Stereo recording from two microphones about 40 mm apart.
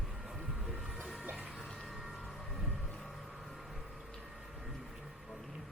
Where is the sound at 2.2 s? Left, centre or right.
Centre.